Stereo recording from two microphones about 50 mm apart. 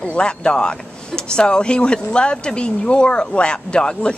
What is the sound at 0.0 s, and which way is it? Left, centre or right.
Speech, centre.